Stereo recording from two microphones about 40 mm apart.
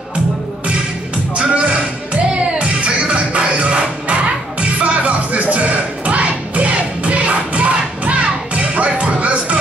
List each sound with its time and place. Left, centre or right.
1.3 s music: right